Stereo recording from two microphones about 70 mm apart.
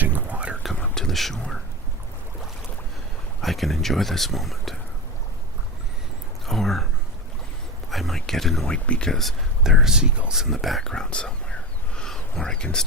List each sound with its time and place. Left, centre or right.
0.0 s whispering: right
0.8 s whispering: centre
3.4 s speech: centre
6.4 s speech: centre
7.9 s a sound: centre
8.6 s speech: centre
9.6 s speech: centre
11.9 s a sound: centre